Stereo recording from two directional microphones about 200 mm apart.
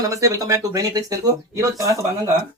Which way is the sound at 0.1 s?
15° right (ahead or behind).